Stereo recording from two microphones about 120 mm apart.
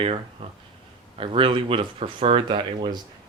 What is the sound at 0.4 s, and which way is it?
Speech, 50° right (ahead or behind).